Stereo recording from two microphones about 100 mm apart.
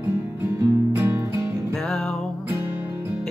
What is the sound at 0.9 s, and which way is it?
Music, 25° right (ahead or behind).